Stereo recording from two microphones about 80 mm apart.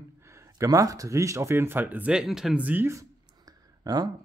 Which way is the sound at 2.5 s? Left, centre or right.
Right.